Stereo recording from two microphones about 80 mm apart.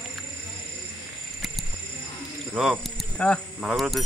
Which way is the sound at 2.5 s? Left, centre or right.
Centre.